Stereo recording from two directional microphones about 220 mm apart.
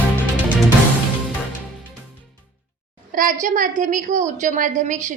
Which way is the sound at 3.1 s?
40° right (ahead or behind).